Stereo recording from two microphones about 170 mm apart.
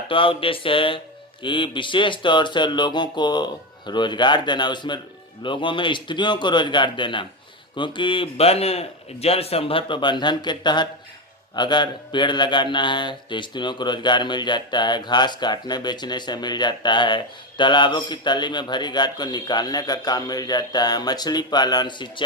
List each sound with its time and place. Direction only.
0.1 s a man's voice: 30° left (ahead or behind)